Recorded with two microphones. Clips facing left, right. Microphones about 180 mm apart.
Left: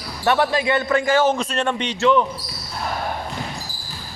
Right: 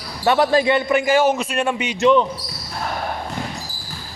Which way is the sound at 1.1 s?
10° right (ahead or behind).